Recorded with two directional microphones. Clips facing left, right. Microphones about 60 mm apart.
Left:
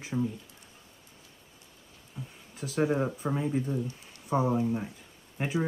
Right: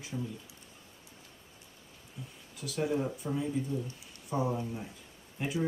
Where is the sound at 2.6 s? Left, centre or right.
Left.